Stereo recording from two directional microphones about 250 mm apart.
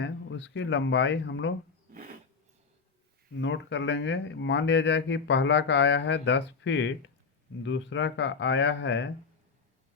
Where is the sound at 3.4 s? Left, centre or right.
Left.